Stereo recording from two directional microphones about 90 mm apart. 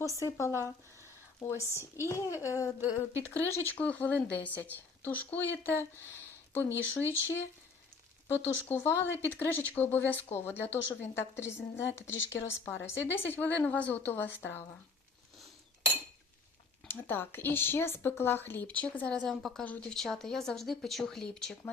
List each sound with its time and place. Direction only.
0.0 s speech: 35° right (ahead or behind)
0.3 s a woman's voice: 30° left (ahead or behind)
3.5 s speech: 15° left (ahead or behind)
16.9 s speech: 25° left (ahead or behind)